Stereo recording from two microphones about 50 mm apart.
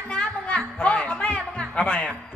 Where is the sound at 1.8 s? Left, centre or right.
Left.